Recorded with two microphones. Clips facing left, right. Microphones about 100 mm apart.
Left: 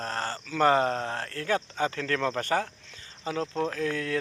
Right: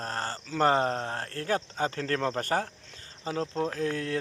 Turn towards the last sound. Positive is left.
turn(degrees=-30)  # may be behind; listen again after turning